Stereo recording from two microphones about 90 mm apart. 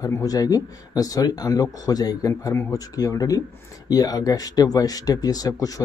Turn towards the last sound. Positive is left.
turn(degrees=40)  # may be behind; listen again after turning